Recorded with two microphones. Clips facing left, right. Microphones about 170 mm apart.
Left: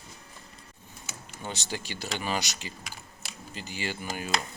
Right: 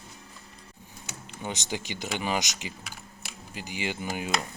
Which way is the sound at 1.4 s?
15° right (ahead or behind).